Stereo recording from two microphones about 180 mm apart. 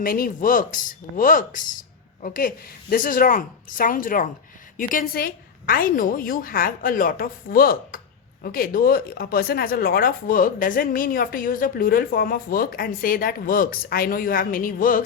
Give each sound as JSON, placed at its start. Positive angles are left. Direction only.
{"t": 0.0, "sound": "a woman's voice", "side_deg": 50}